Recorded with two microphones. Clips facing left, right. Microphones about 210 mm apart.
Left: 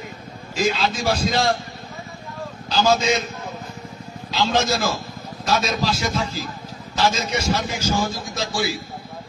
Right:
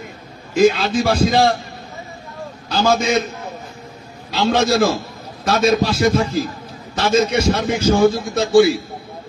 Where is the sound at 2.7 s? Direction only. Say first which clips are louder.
Right 2 dB; 55° right (ahead or behind).